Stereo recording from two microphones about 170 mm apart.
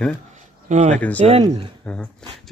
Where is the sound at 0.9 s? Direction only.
10° left (ahead or behind).